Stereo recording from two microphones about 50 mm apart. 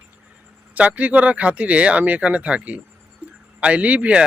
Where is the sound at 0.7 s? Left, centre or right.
Right.